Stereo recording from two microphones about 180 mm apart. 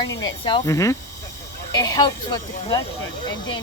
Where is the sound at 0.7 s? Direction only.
15° left (ahead or behind).